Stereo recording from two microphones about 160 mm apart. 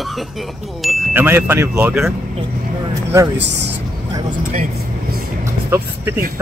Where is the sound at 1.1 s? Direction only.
15° right (ahead or behind).